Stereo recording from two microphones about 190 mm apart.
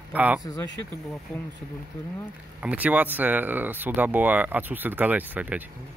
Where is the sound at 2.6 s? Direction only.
10° right (ahead or behind).